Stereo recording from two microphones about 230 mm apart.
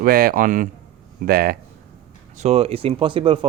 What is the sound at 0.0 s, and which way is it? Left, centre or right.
Speech, right.